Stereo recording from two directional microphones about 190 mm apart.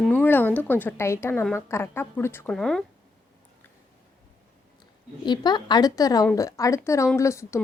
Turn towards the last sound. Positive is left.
turn(degrees=15)  # may be behind; listen again after turning